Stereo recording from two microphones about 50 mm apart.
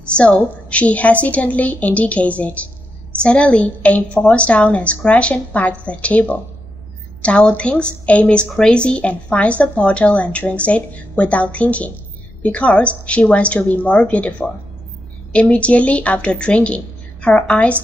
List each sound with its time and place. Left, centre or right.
0.0 s a woman's voice: left